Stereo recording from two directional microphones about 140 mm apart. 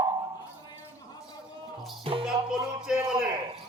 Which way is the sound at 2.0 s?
40° right (ahead or behind).